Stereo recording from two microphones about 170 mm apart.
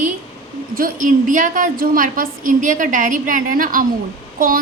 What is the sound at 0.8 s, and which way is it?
A woman's voice, 50° right (ahead or behind).